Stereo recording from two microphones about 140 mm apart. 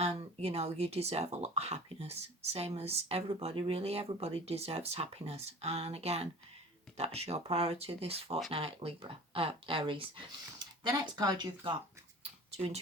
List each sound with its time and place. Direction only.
0.4 s speech: 50° right (ahead or behind)
11.0 s speech: 30° right (ahead or behind)